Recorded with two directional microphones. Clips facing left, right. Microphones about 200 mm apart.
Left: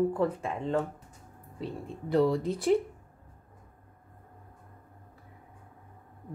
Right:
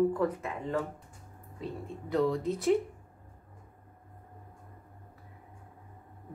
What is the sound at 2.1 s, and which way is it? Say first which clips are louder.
Speech: left 3 dB; 35° left (ahead or behind).